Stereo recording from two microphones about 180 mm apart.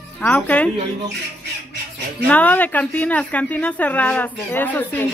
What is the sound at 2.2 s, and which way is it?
A woman's voice, 10° left (ahead or behind).